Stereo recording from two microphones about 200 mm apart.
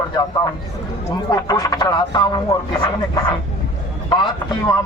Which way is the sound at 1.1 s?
20° left (ahead or behind).